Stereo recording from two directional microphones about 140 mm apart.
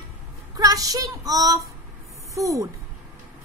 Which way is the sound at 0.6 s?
25° right (ahead or behind).